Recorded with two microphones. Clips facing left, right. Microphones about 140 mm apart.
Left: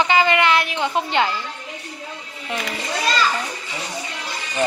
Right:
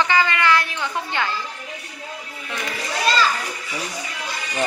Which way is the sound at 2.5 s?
25° left (ahead or behind).